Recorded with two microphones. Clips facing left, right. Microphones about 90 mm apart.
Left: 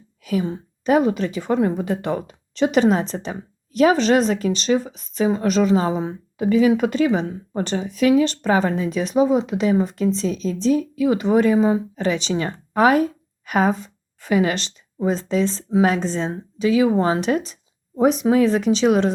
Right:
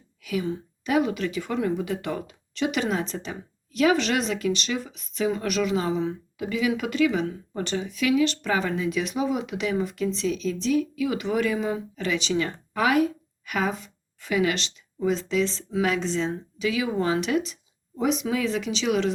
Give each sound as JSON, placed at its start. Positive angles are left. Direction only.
{"t": 0.3, "sound": "a woman's voice", "side_deg": 35}